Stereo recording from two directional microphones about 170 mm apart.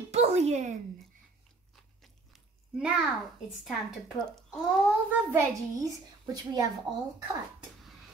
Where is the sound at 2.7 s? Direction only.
5° right (ahead or behind).